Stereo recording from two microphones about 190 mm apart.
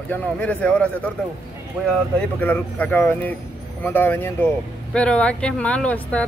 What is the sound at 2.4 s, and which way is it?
Speech, 10° left (ahead or behind).